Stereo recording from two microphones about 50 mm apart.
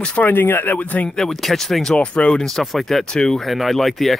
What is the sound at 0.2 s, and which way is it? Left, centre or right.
Speech, left.